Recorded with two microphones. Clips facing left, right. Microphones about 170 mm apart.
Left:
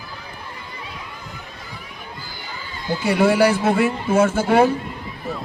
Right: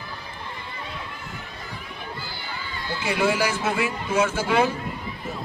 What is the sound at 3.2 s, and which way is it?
A man's voice, 55° left (ahead or behind).